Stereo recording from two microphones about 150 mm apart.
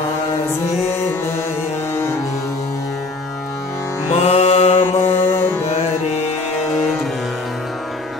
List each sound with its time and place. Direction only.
4.1 s music: 40° left (ahead or behind)
4.8 s mantra: 15° left (ahead or behind)